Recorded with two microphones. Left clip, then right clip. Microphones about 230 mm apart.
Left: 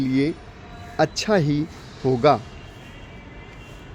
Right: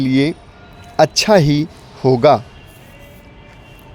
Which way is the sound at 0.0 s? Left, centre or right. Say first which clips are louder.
Right 6 dB; right.